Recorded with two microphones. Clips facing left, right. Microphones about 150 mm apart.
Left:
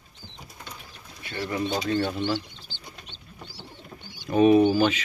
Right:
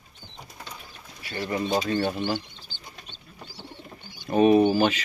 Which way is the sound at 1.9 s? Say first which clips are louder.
Even; 45° right (ahead or behind).